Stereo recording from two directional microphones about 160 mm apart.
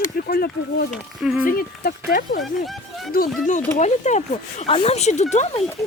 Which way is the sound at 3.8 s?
45° left (ahead or behind).